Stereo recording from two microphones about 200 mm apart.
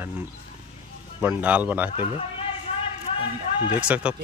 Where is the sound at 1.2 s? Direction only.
5° right (ahead or behind).